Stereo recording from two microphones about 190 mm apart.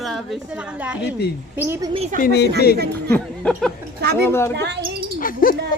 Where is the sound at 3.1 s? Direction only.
5° left (ahead or behind).